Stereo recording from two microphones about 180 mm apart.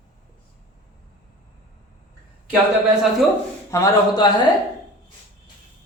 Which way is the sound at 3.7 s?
25° left (ahead or behind).